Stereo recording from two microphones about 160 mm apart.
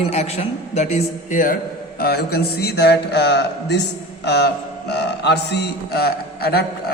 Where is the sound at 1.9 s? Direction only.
80° left.